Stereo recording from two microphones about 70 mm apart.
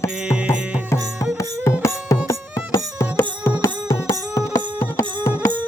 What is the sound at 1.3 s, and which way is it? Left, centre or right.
Music, left.